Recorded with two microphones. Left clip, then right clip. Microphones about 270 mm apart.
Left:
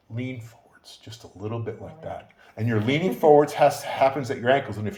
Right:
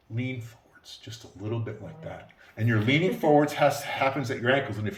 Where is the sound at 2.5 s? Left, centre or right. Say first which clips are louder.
Even; centre.